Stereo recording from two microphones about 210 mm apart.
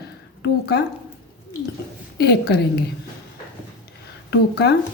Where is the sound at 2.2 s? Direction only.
50° left (ahead or behind).